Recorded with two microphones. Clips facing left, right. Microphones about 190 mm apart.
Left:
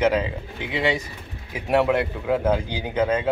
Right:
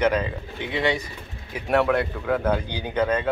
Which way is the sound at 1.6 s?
10° left (ahead or behind).